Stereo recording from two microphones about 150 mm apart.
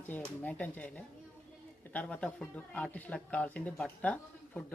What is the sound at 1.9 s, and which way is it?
Speech, 10° left (ahead or behind).